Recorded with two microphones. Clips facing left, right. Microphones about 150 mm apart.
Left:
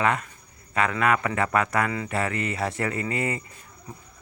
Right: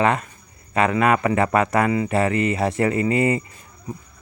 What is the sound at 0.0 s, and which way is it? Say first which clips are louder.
Speech: right 5 dB; 25° right (ahead or behind).